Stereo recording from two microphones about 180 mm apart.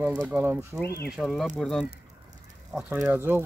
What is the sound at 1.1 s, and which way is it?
Speech, centre (ahead or behind).